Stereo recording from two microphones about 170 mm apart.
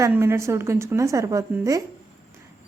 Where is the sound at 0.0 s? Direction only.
15° right (ahead or behind).